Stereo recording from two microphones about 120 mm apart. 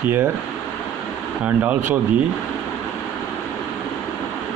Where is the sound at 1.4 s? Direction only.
15° right (ahead or behind).